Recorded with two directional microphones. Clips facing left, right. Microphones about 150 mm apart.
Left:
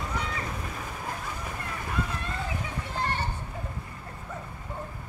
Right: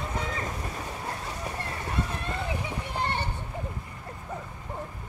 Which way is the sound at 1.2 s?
35° right (ahead or behind).